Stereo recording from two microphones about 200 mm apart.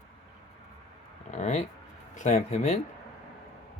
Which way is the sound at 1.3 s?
35° left (ahead or behind).